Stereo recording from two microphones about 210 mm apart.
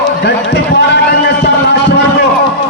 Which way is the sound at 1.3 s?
55° left (ahead or behind).